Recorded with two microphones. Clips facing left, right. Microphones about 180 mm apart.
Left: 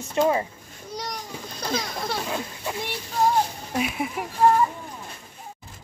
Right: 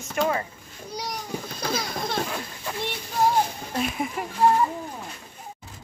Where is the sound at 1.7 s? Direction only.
20° left (ahead or behind).